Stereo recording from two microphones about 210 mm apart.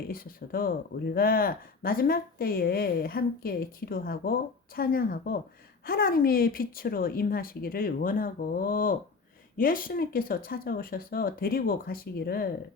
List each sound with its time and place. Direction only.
0.1 s a woman's voice: 45° left (ahead or behind)